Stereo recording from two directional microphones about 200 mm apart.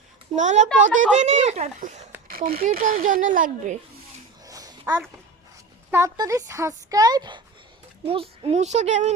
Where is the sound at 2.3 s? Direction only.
45° right (ahead or behind).